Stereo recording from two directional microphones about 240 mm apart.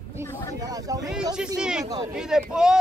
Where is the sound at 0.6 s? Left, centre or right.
Centre.